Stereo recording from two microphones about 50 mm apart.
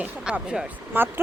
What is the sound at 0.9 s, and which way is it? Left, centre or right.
Speech, right.